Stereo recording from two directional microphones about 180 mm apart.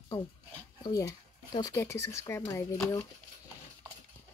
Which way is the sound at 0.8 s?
20° left (ahead or behind).